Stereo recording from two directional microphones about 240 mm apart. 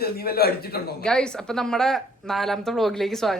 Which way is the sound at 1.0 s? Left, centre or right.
Centre.